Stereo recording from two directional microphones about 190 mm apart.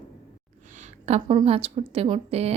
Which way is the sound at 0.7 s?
40° right (ahead or behind).